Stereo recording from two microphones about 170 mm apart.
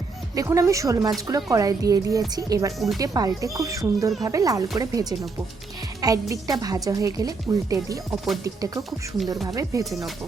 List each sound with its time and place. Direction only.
0.3 s speech: 20° right (ahead or behind)